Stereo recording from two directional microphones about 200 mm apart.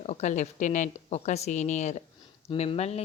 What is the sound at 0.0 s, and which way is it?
Speech, 35° left (ahead or behind).